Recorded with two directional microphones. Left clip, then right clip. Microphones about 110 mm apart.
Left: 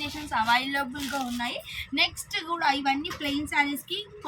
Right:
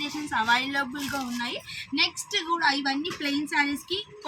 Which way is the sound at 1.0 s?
10° left (ahead or behind).